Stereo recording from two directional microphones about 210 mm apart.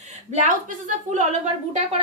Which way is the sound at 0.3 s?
35° right (ahead or behind).